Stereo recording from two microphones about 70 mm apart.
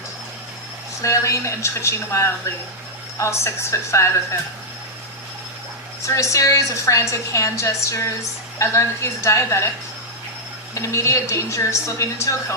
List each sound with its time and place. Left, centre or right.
1.0 s a woman's voice: left
6.0 s a woman's voice: left
10.8 s a woman's voice: left